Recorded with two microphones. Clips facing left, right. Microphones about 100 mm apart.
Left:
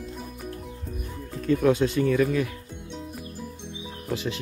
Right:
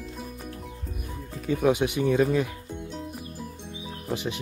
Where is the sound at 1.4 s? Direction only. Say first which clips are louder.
Left 2 dB; 15° right (ahead or behind).